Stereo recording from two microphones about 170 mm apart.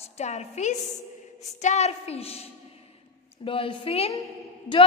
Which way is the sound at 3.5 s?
30° left (ahead or behind).